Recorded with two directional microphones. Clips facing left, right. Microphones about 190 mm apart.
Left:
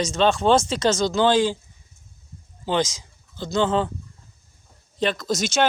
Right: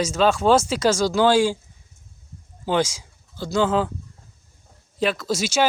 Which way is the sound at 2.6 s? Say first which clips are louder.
Right 1 dB; 10° right (ahead or behind).